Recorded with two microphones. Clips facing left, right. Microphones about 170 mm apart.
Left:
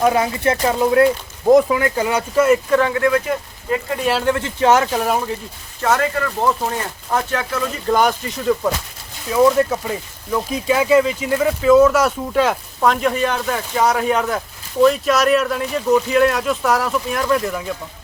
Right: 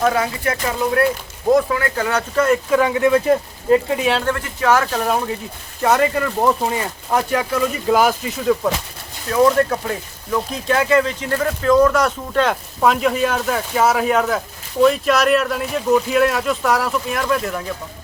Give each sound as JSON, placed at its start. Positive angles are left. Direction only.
{"t": 0.0, "sound": "speech", "side_deg": 20}
{"t": 2.6, "sound": "speech", "side_deg": -5}
{"t": 2.9, "sound": "speech", "side_deg": -20}
{"t": 3.9, "sound": "speech", "side_deg": 0}
{"t": 4.4, "sound": "speech", "side_deg": 25}
{"t": 4.9, "sound": "speech", "side_deg": 5}
{"t": 5.8, "sound": "speech", "side_deg": -20}